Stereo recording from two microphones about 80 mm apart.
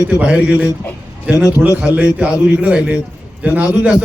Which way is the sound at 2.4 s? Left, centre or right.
Centre.